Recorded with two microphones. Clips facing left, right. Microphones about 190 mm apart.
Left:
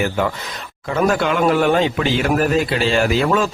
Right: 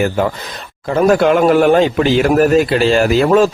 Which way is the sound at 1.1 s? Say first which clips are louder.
Right 7 dB; 45° right (ahead or behind).